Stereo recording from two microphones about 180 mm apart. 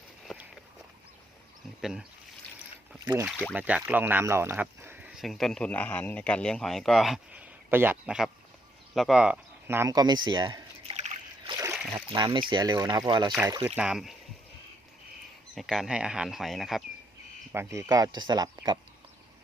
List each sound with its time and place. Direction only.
1.8 s speech: 5° right (ahead or behind)
3.0 s speech: 15° right (ahead or behind)
3.2 s speech: 5° left (ahead or behind)
3.5 s speech: 10° right (ahead or behind); by 10.9 s 25° right (ahead or behind)
11.9 s speech: 25° right (ahead or behind)
13.7 s speech: 5° right (ahead or behind)
15.5 s speech: centre (ahead or behind)
17.5 s speech: 15° right (ahead or behind)